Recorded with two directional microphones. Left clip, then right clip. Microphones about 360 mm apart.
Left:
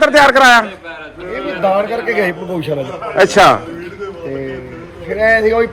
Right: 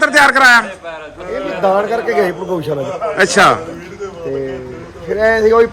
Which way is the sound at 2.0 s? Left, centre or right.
Right.